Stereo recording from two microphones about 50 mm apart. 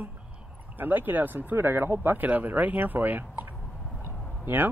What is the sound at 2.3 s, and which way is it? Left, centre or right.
Speech, right.